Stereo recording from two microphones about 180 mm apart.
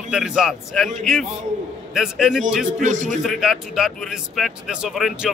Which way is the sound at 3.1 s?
Centre (ahead or behind).